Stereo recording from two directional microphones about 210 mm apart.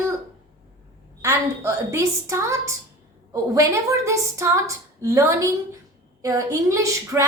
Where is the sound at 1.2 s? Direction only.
15° right (ahead or behind).